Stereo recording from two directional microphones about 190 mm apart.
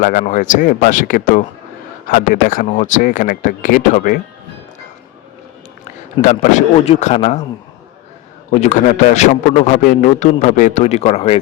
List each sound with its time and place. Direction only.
0.0 s speech: 45° left (ahead or behind)
6.2 s a man's voice: 40° left (ahead or behind)
8.4 s a man's voice: 40° left (ahead or behind)